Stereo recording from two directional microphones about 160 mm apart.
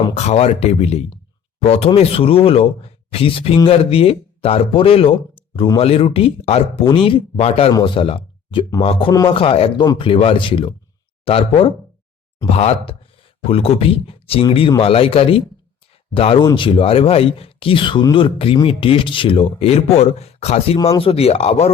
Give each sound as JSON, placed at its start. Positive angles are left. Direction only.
{"t": 0.1, "sound": "speech", "side_deg": 40}
{"t": 7.7, "sound": "speech", "side_deg": 25}